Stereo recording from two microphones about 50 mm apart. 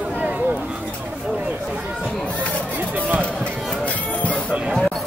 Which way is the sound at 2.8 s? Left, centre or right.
Right.